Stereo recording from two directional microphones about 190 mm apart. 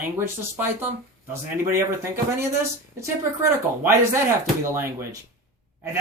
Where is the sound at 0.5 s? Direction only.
10° right (ahead or behind).